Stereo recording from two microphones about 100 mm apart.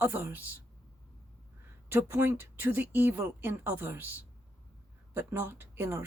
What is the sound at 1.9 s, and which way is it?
Speech, 25° right (ahead or behind).